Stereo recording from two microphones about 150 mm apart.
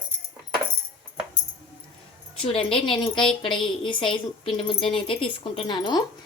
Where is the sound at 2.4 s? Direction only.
35° left (ahead or behind).